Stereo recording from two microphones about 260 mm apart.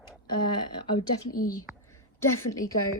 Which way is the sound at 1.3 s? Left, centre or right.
Left.